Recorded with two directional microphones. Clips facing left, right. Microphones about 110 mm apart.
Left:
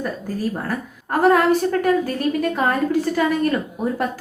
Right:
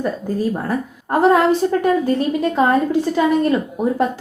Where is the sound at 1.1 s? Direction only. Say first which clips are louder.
Right 2 dB; 20° right (ahead or behind).